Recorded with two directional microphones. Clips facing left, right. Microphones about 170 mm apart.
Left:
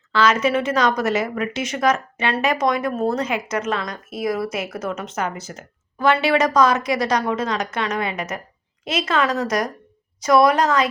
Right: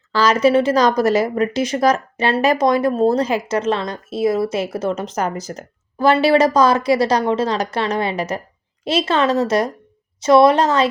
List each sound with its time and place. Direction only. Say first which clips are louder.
0.1 s a woman's voice: right 4 dB; 35° right (ahead or behind)